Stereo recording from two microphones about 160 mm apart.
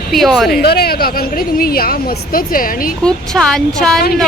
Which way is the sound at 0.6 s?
80° left.